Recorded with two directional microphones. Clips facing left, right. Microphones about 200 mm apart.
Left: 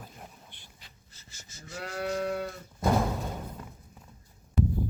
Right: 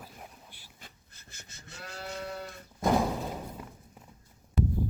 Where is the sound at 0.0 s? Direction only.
Centre (ahead or behind).